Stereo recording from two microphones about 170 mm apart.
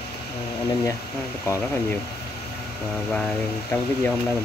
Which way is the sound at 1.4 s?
15° left (ahead or behind).